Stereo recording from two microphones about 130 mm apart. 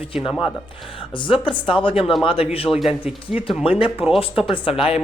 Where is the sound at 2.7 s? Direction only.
15° left (ahead or behind).